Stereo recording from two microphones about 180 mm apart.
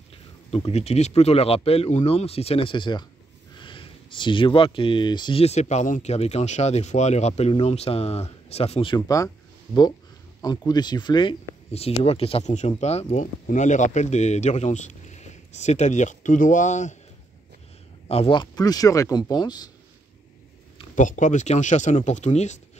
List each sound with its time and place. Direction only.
0.1 s speech: 35° left (ahead or behind)
8.9 s speech: 20° left (ahead or behind)
10.7 s speech: 25° left (ahead or behind); by 16.9 s 40° left (ahead or behind)
18.0 s speech: 35° left (ahead or behind)
20.9 s speech: 45° left (ahead or behind)